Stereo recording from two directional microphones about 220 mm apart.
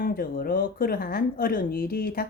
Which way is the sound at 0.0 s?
40° left (ahead or behind).